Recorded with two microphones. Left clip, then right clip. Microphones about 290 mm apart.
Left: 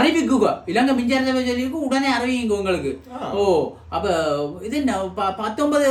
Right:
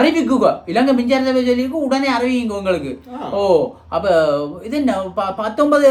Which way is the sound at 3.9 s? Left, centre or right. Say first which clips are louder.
Right 6 dB; centre.